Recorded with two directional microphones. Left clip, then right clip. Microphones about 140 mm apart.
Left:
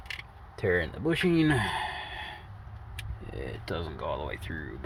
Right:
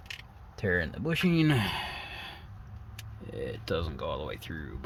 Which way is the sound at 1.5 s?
45° right (ahead or behind).